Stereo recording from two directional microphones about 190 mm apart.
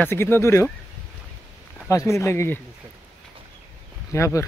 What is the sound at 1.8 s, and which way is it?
Speech, 15° left (ahead or behind).